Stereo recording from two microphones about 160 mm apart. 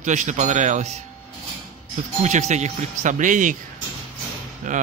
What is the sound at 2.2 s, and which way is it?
Speech, 45° right (ahead or behind).